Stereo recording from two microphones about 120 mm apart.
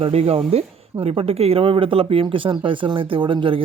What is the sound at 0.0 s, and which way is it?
Speech, 60° right (ahead or behind).